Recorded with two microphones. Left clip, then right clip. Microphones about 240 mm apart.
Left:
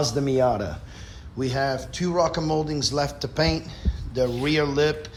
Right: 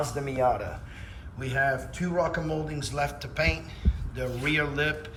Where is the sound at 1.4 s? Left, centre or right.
Centre.